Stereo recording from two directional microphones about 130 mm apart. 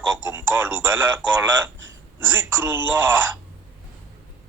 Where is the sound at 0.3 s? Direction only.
15° right (ahead or behind).